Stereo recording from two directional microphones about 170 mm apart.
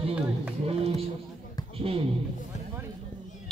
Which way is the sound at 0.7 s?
35° right (ahead or behind).